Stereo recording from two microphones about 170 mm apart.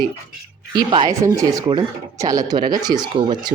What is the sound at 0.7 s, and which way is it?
Speech, 25° right (ahead or behind).